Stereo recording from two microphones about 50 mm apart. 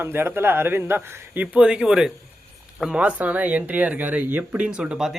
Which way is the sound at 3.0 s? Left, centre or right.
Right.